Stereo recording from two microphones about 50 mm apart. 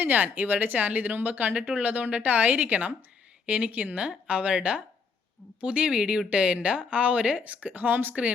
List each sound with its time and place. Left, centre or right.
0.0 s a woman's voice: right